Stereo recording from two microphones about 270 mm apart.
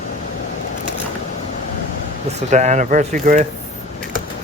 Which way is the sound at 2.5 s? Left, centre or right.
Right.